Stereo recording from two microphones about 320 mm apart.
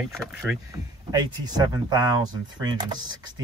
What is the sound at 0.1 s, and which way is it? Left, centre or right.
Speech, centre.